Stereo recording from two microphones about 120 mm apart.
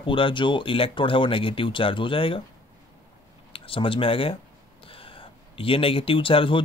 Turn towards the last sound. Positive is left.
turn(degrees=45)  # may be behind; listen again after turning